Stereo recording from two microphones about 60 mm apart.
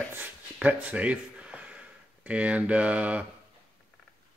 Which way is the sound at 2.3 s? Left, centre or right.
Right.